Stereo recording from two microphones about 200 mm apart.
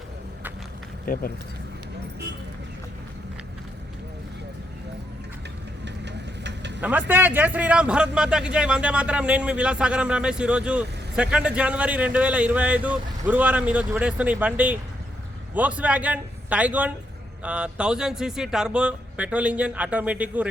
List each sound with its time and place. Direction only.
1.0 s speech: 45° left (ahead or behind)
5.8 s vehicle: 60° right (ahead or behind)
7.1 s a man's voice: 10° right (ahead or behind)